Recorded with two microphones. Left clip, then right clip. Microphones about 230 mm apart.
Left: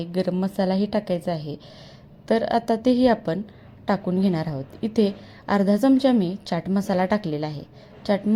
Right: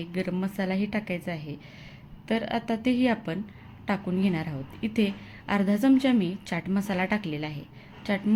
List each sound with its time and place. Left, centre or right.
0.0 s a woman's voice: centre